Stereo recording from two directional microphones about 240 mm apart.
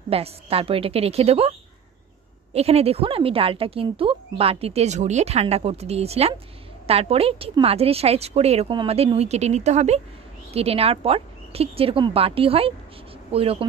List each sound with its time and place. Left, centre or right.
0.1 s speech: right
2.5 s speech: right